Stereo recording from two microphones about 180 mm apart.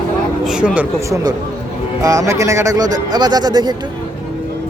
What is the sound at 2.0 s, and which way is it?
Speech, 20° right (ahead or behind).